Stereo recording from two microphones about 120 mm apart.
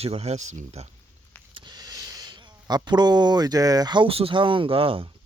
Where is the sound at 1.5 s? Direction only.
35° right (ahead or behind).